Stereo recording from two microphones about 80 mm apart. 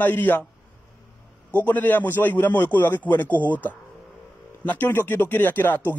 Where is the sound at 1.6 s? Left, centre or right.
Left.